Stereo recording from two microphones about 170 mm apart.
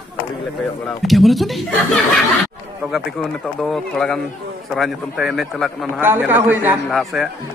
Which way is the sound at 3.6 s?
5° left (ahead or behind).